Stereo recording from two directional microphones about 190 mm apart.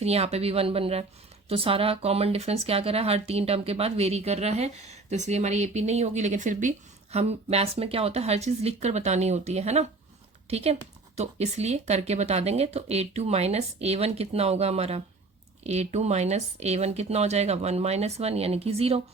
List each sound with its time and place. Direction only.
0.0 s speech: 35° right (ahead or behind)